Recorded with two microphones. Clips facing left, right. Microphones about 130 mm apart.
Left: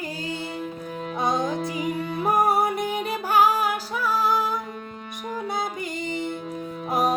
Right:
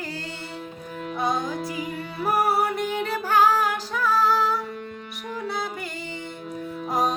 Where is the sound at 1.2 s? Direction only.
20° left (ahead or behind).